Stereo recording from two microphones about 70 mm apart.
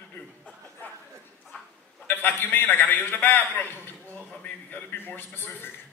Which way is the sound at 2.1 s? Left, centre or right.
Left.